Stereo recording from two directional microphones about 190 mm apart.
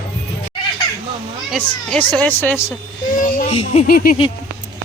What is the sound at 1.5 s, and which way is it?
A woman's voice, 5° left (ahead or behind).